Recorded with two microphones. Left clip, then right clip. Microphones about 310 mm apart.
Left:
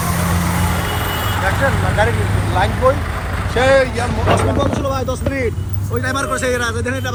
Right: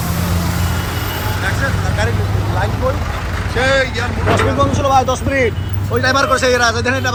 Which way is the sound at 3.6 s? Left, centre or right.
Centre.